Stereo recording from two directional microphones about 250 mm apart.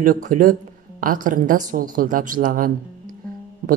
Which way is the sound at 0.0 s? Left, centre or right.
Right.